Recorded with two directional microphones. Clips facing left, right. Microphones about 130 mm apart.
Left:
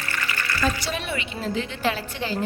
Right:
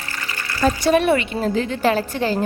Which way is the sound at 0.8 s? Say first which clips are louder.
Right 13 dB; 55° right (ahead or behind).